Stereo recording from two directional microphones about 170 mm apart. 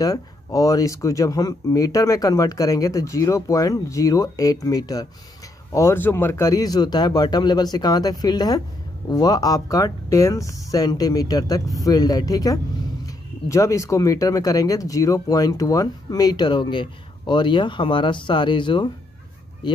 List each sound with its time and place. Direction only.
0.0 s speech: 20° left (ahead or behind)